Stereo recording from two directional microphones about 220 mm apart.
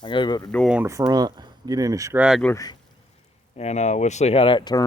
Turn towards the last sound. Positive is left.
turn(degrees=15)  # may be behind; listen again after turning